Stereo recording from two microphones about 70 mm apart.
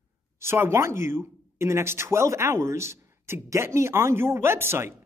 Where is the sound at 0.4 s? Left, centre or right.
Right.